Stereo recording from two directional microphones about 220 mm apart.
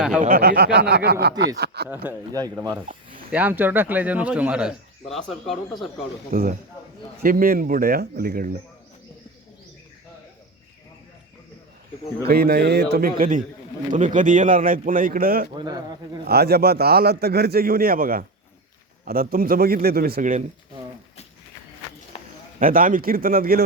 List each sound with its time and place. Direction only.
0.2 s a man's voice: 40° right (ahead or behind)
2.0 s speech: 15° right (ahead or behind)
6.3 s speech: 40° right (ahead or behind)
12.3 s a man's voice: 45° right (ahead or behind)
15.5 s speech: 20° right (ahead or behind)
16.2 s a man's voice: 45° right (ahead or behind)
22.6 s speech: 40° right (ahead or behind)